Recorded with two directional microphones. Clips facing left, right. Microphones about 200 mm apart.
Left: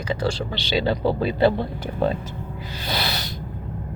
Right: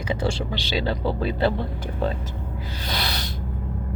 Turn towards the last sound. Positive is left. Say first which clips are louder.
# left 2 dB
turn(degrees=5)  # may be behind; listen again after turning